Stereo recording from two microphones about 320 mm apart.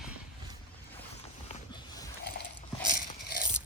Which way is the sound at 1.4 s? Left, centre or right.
Centre.